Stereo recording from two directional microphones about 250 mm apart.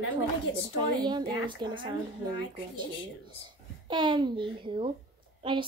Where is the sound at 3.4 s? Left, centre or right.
Centre.